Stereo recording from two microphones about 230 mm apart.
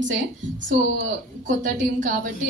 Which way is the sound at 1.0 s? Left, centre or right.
Right.